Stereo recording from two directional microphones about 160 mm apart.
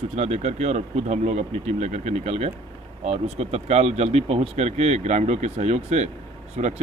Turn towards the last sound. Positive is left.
turn(degrees=-45)  # may be behind; listen again after turning